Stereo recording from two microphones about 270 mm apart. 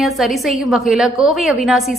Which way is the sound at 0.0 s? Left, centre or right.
Centre.